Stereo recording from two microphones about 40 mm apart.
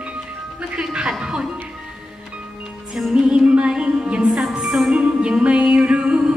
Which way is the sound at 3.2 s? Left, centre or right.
Right.